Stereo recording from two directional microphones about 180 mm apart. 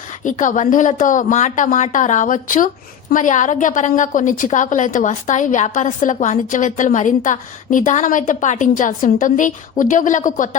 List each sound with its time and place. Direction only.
0.3 s a woman's voice: 45° left (ahead or behind)